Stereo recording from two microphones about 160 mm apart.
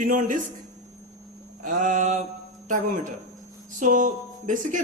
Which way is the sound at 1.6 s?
50° right (ahead or behind).